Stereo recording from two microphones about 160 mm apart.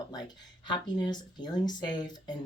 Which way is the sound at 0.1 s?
25° left (ahead or behind).